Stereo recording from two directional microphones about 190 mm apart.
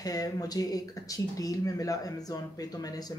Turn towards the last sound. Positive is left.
turn(degrees=20)  # may be behind; listen again after turning